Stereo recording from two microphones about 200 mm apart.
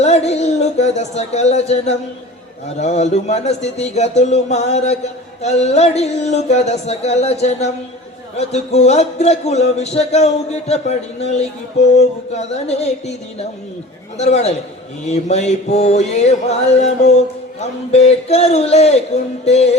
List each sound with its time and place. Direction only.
0.0 s a sound: 35° left (ahead or behind)
2.7 s speech: 35° left (ahead or behind)
14.2 s speech: 30° left (ahead or behind)